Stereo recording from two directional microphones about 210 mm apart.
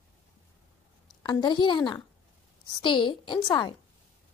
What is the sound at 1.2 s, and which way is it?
A woman's voice, 20° left (ahead or behind).